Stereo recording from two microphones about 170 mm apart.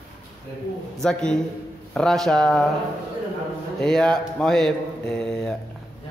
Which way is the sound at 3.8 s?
5° left (ahead or behind).